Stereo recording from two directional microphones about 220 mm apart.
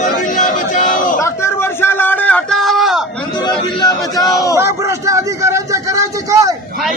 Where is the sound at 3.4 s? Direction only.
20° left (ahead or behind).